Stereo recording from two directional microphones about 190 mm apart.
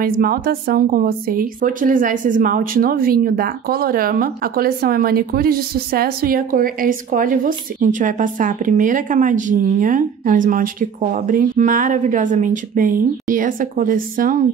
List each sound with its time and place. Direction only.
0.0 s a woman's voice: 50° right (ahead or behind)